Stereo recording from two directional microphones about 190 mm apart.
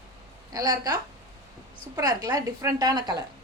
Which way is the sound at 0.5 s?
20° right (ahead or behind).